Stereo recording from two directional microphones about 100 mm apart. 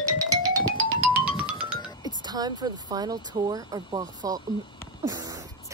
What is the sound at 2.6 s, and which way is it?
Speech, 40° right (ahead or behind).